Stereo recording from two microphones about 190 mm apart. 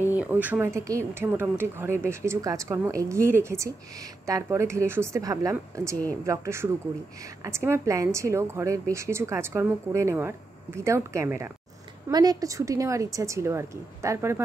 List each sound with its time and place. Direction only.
0.1 s speech: 10° right (ahead or behind)